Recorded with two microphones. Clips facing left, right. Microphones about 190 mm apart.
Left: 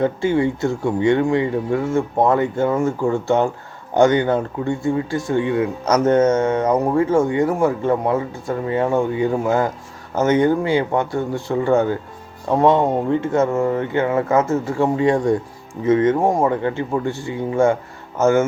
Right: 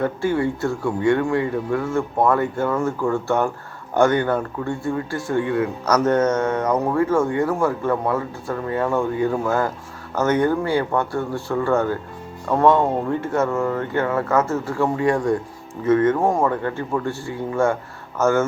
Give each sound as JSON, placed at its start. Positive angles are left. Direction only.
{"t": 0.0, "sound": "speech", "side_deg": 20}